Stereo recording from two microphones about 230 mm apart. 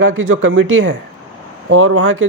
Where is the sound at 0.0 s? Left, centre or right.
Right.